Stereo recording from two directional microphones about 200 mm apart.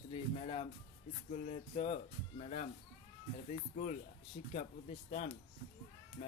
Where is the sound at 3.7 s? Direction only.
40° left (ahead or behind).